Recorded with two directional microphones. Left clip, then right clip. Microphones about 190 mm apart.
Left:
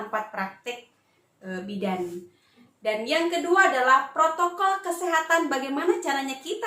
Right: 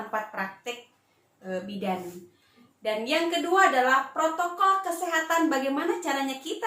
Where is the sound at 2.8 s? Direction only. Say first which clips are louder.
Left 2 dB; 15° left (ahead or behind).